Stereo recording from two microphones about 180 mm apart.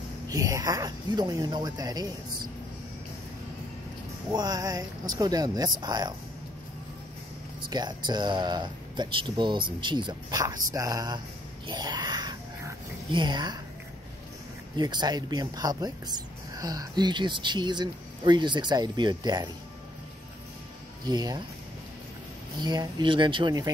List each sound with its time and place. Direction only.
0.3 s speech: 20° right (ahead or behind)
4.3 s speech: 20° right (ahead or behind)
7.6 s speech: 25° right (ahead or behind)
11.6 s a sound: 25° right (ahead or behind)
14.8 s speech: 25° right (ahead or behind)
21.0 s speech: 25° right (ahead or behind)
22.6 s speech: 25° right (ahead or behind)